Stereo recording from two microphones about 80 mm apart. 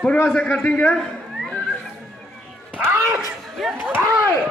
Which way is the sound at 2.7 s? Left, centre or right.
Centre.